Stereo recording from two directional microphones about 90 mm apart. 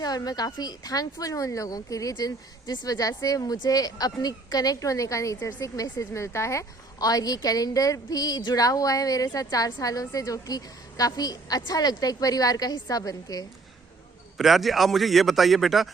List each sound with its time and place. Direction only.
0.0 s a woman's voice: 45° left (ahead or behind)
14.3 s a man's voice: centre (ahead or behind)